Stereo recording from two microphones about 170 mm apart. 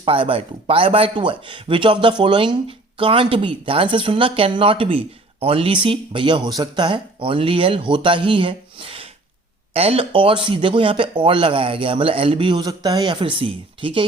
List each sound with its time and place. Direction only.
0.0 s speech: 30° right (ahead or behind)